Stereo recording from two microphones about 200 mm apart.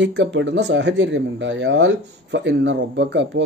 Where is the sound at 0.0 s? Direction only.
60° right (ahead or behind).